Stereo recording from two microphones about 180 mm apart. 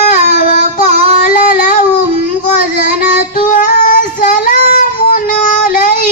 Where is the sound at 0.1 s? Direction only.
45° left (ahead or behind).